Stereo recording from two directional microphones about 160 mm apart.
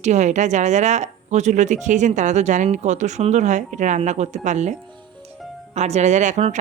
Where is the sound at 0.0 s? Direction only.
45° right (ahead or behind).